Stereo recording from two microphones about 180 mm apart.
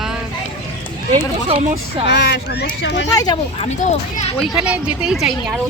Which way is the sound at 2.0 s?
75° left (ahead or behind).